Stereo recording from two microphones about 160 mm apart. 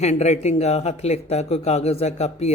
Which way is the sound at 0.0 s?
45° left (ahead or behind).